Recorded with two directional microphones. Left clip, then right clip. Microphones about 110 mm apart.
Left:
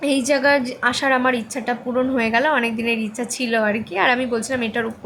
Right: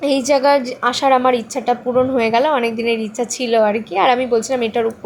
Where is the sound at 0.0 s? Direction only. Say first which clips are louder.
Right 4 dB; 15° right (ahead or behind).